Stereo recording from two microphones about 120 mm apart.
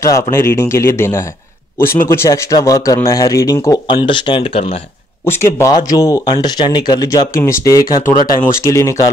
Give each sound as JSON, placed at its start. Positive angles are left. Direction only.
{"t": 0.0, "sound": "speech", "side_deg": 25}
{"t": 3.8, "sound": "speech", "side_deg": 45}
{"t": 5.2, "sound": "speech", "side_deg": 20}
{"t": 6.2, "sound": "speech", "side_deg": 40}